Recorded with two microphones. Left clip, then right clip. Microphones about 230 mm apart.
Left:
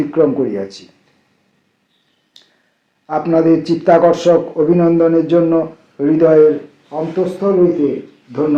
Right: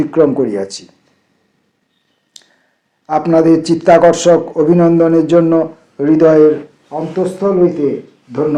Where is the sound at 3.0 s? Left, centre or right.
Right.